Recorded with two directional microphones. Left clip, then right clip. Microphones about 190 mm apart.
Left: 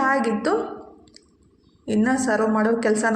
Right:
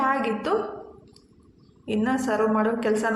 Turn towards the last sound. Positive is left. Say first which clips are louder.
# left 3 dB
turn(degrees=20)  # may be behind; listen again after turning